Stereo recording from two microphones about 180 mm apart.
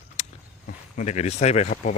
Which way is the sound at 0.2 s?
40° left (ahead or behind).